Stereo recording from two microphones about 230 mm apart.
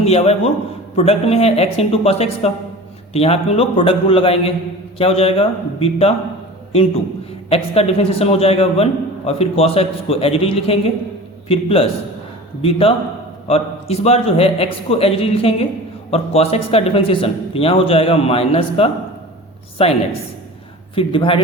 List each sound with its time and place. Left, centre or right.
0.0 s a man's voice: left
13.5 s a man's voice: left